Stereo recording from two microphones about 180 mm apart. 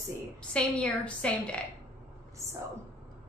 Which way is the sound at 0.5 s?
5° left (ahead or behind).